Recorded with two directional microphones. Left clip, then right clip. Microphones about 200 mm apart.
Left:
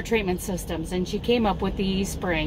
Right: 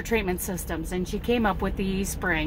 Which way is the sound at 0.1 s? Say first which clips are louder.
Left 2 dB; 5° right (ahead or behind).